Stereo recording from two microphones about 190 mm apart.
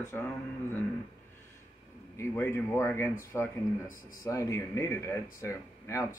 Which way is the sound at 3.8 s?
45° left (ahead or behind).